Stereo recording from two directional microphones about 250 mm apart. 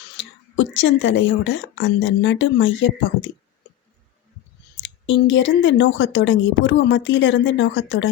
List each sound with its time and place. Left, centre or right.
0.2 s speech: left
4.8 s speech: left